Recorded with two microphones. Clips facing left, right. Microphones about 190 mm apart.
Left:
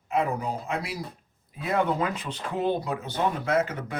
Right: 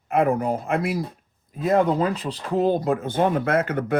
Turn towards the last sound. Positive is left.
turn(degrees=-60)  # may be behind; listen again after turning